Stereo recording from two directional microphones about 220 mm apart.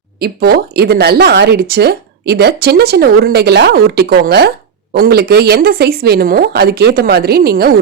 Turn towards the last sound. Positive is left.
turn(degrees=-45)  # may be behind; listen again after turning